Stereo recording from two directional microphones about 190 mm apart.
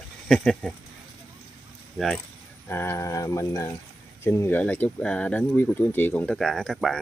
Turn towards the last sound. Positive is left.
turn(degrees=0)  # may be behind; listen again after turning